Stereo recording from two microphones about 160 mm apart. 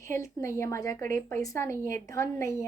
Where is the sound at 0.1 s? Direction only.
20° left (ahead or behind).